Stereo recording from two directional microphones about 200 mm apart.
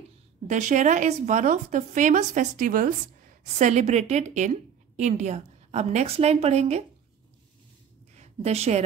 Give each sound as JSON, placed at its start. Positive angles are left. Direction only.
{"t": 0.5, "sound": "speech", "side_deg": -40}
{"t": 8.2, "sound": "a woman's voice", "side_deg": -30}